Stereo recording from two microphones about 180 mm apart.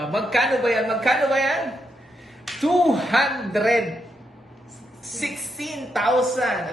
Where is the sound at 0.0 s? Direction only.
Centre (ahead or behind).